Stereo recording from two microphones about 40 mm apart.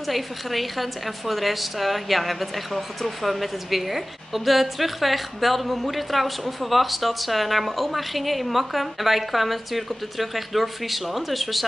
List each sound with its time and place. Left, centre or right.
0.0 s a woman's voice: centre